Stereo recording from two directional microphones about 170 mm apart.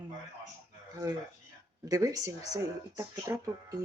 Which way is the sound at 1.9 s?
20° right (ahead or behind).